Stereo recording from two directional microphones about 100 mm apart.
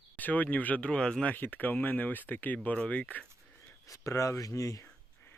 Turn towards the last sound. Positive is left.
turn(degrees=35)  # may be behind; listen again after turning